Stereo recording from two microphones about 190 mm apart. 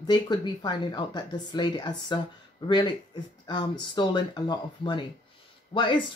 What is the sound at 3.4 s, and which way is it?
Speech, 25° left (ahead or behind).